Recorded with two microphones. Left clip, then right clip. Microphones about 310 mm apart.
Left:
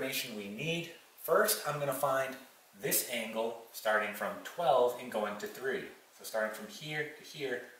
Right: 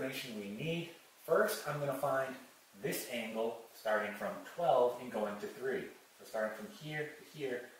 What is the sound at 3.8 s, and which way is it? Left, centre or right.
Speech, centre.